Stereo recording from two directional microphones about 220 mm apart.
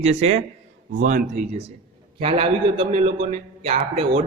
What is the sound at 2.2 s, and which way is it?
A man's voice, 25° right (ahead or behind).